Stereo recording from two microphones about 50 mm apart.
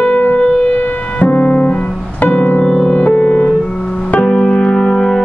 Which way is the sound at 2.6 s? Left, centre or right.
Centre.